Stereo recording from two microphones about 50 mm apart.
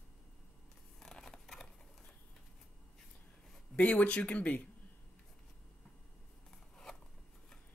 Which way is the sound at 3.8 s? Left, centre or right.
Left.